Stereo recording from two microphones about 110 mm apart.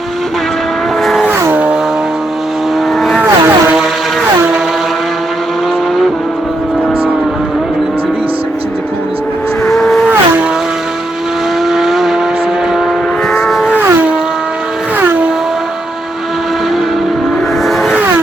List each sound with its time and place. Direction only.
1.5 s a sound: 10° right (ahead or behind)
3.0 s vehicle: 5° left (ahead or behind)
3.2 s vehicle: 20° right (ahead or behind)
9.6 s vehicle: 5° left (ahead or behind)
11.7 s vehicle: 5° right (ahead or behind)
13.3 s vehicle: 5° left (ahead or behind)
13.7 s a sound: 15° right (ahead or behind)
17.7 s vehicle: centre (ahead or behind)